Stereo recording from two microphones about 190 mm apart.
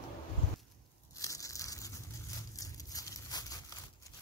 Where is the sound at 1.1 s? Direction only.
15° left (ahead or behind).